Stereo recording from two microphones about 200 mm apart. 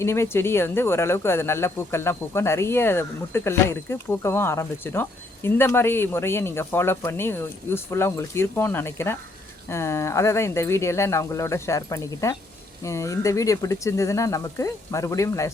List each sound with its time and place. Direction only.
0.0 s speech: 15° left (ahead or behind)